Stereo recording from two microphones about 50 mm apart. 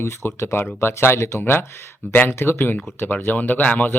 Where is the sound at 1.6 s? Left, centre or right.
Left.